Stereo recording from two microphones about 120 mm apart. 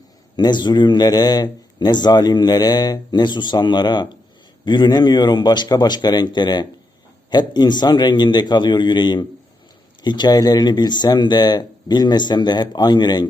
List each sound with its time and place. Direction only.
0.3 s a man's voice: 40° left (ahead or behind)